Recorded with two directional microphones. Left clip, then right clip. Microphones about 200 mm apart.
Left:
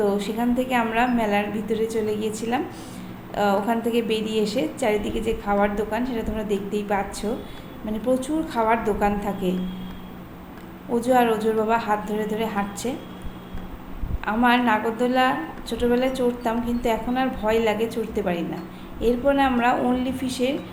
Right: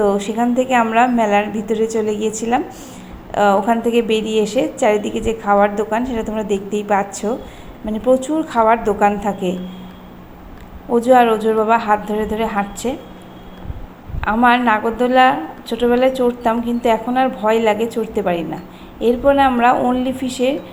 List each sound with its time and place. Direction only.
0.0 s a woman's voice: 30° right (ahead or behind)
10.9 s a woman's voice: 30° right (ahead or behind)
14.2 s a woman's voice: 25° right (ahead or behind)